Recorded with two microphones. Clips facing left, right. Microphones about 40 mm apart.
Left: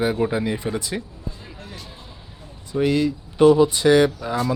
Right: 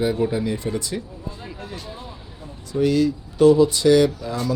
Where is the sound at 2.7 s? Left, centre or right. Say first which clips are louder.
Right 1 dB; left.